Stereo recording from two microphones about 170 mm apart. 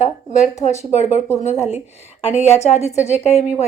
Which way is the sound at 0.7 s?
40° left (ahead or behind).